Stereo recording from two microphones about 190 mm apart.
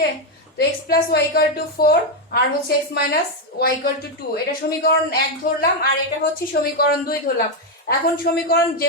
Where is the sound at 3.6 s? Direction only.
55° left (ahead or behind).